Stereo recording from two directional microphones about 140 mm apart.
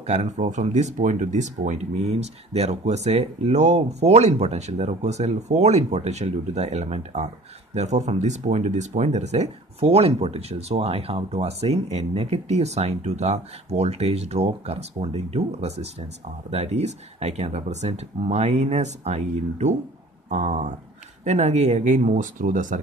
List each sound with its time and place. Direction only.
0.0 s speech: 55° right (ahead or behind)